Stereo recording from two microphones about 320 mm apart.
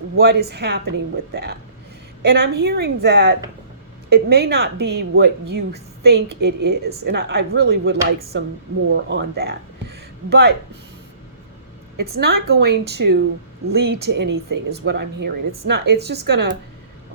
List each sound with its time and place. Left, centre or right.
0.2 s a woman's voice: right
12.0 s a woman's voice: right